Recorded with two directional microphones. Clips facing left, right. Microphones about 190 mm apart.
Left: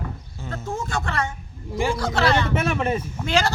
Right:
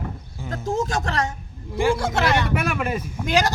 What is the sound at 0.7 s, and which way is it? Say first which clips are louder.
Speech: right 4 dB; 90° right.